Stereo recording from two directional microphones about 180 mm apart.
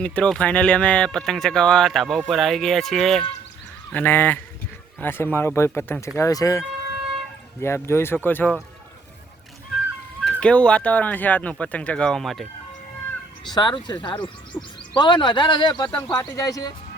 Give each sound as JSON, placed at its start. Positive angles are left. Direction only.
{"t": 0.0, "sound": "speech", "side_deg": 5}
{"t": 10.2, "sound": "speech", "side_deg": 5}
{"t": 13.5, "sound": "speech", "side_deg": 25}